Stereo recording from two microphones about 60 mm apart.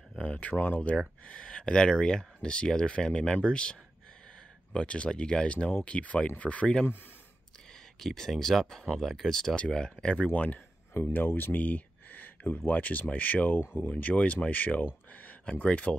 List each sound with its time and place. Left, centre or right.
0.2 s speech: left
4.7 s speech: centre
8.0 s speech: centre
10.1 s speech: left
11.1 s a sound: left
12.6 s speech: left
13.6 s speech: left